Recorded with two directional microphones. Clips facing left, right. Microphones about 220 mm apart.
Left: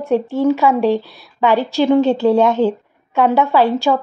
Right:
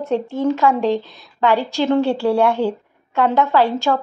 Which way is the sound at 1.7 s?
15° left (ahead or behind).